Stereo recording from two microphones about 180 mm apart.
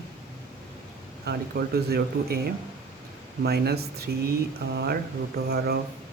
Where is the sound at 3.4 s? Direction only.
65° right (ahead or behind).